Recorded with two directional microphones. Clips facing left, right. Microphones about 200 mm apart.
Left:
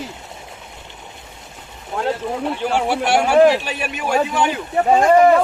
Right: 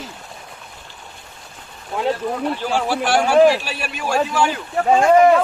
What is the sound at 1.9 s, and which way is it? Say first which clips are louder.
Speech: right 1 dB; centre (ahead or behind).